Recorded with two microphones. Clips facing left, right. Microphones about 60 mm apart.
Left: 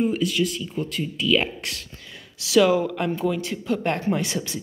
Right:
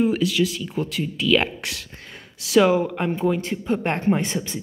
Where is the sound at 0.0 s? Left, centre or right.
Right.